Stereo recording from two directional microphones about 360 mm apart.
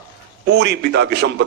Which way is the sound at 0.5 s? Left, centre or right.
Right.